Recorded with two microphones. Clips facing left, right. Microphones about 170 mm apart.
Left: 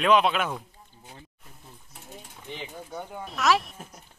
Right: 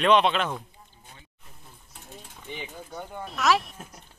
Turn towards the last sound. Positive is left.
turn(degrees=0)  # may be behind; listen again after turning